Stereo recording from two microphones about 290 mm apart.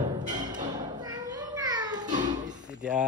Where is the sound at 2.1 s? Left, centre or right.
Right.